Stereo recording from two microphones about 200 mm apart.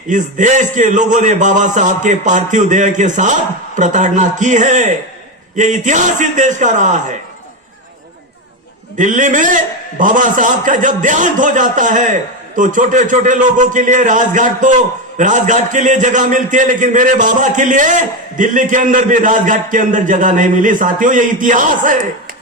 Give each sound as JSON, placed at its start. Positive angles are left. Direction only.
{"t": 0.1, "sound": "a man's voice", "side_deg": -40}
{"t": 9.0, "sound": "a man's voice", "side_deg": -40}